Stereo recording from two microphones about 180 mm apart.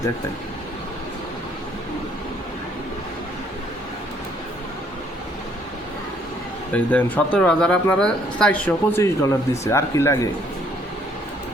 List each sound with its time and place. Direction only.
6.7 s speech: 10° left (ahead or behind)